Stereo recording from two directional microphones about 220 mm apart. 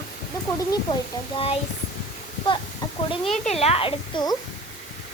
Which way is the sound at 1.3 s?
25° left (ahead or behind).